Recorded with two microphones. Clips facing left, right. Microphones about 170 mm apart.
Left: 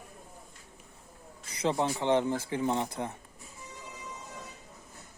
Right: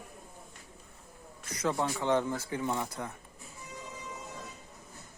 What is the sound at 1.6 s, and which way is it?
Speech, 20° left (ahead or behind).